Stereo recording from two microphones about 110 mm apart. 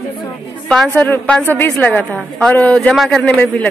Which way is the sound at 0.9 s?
15° left (ahead or behind).